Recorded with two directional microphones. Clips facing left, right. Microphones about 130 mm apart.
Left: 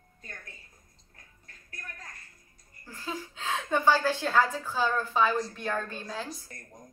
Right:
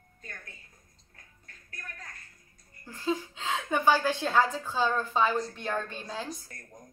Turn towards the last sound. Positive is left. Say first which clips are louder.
# even
turn(degrees=-25)  # may be behind; listen again after turning